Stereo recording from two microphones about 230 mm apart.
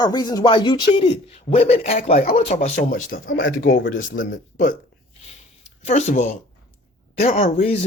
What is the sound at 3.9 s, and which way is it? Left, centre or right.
Speech, left.